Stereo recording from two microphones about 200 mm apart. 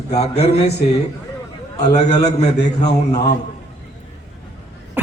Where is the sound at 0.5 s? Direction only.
55° left (ahead or behind).